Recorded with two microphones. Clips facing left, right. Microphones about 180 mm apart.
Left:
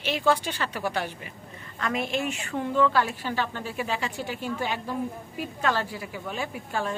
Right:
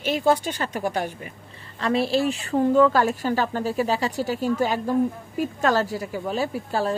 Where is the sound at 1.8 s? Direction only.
30° right (ahead or behind).